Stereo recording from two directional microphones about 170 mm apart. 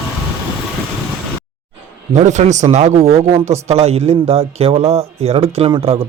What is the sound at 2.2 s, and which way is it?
A man's voice, 45° right (ahead or behind).